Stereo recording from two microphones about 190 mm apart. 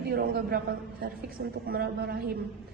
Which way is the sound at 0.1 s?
55° right (ahead or behind).